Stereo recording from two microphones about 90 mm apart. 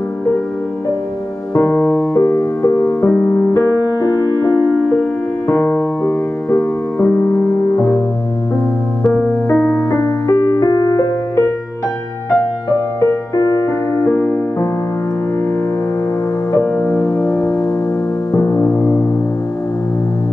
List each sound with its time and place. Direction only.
1.5 s music: 25° left (ahead or behind)
3.5 s music: 45° left (ahead or behind)
5.5 s music: 25° left (ahead or behind)
9.1 s music: 10° left (ahead or behind)
9.5 s music: 25° left (ahead or behind)
16.6 s music: 20° left (ahead or behind)